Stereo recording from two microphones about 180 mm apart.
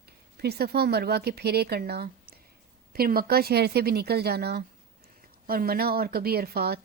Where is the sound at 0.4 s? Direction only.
60° right (ahead or behind).